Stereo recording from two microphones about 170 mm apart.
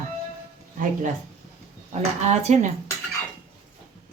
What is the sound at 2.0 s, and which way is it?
Speech, 40° right (ahead or behind).